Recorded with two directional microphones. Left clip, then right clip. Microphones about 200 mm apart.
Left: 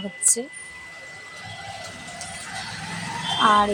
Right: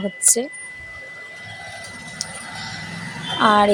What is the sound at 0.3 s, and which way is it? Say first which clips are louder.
Speech: right 5 dB; 20° right (ahead or behind).